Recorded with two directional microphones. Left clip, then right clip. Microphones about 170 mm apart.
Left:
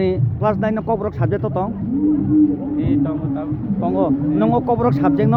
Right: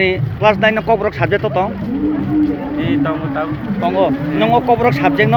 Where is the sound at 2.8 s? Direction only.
15° left (ahead or behind).